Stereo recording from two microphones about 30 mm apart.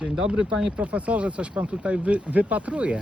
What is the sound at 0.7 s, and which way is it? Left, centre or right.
Speech, right.